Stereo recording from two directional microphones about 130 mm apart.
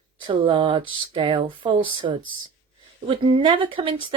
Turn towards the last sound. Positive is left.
turn(degrees=-40)  # may be behind; listen again after turning